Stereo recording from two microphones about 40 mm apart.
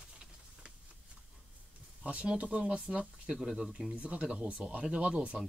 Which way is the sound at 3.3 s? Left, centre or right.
Centre.